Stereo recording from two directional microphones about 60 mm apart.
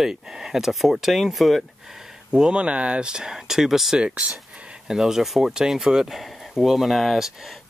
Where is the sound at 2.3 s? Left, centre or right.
Centre.